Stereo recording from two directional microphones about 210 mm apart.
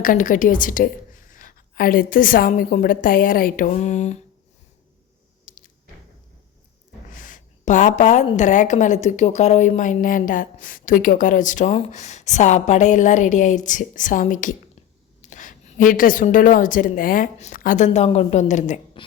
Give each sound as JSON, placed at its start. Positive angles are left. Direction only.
{"t": 0.0, "sound": "a woman's voice", "side_deg": 40}
{"t": 5.5, "sound": "a sound", "side_deg": 40}
{"t": 7.1, "sound": "a woman's voice", "side_deg": 40}